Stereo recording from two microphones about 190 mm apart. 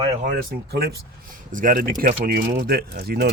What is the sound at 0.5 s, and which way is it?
Speech, 55° right (ahead or behind).